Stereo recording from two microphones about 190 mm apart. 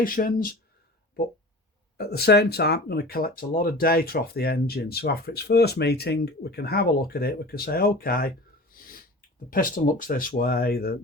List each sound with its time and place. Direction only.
0.0 s speech: 45° left (ahead or behind)
2.0 s speech: 55° left (ahead or behind)
8.7 s snort: 45° left (ahead or behind)
9.5 s speech: 45° left (ahead or behind)